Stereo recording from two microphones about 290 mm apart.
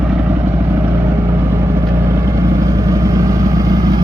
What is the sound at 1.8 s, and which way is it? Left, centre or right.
Vehicle, centre.